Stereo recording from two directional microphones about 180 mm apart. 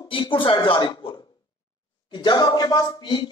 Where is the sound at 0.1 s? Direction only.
25° left (ahead or behind).